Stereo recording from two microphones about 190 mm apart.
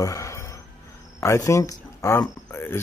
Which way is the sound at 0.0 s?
15° left (ahead or behind).